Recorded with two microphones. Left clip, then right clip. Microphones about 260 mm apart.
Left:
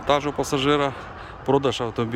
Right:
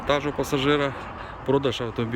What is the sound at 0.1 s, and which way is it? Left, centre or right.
Speech, centre.